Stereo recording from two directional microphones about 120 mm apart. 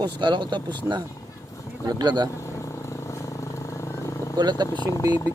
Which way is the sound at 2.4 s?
25° left (ahead or behind).